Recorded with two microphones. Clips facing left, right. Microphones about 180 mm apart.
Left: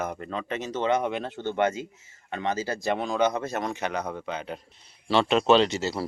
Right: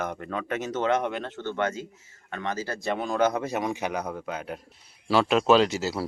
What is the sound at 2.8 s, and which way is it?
A man's voice, centre (ahead or behind).